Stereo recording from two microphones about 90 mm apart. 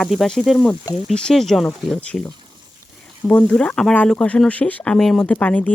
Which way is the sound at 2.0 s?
15° left (ahead or behind).